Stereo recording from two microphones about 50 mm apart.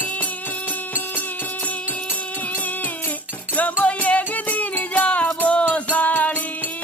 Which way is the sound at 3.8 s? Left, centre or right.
Left.